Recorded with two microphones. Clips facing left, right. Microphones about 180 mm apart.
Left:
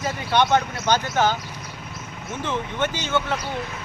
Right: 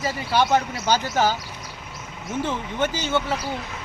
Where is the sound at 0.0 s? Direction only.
5° right (ahead or behind).